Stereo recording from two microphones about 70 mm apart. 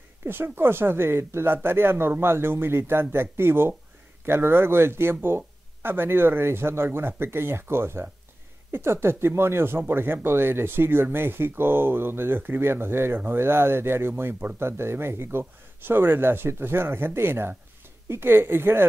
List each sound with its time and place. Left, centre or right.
0.2 s speech: right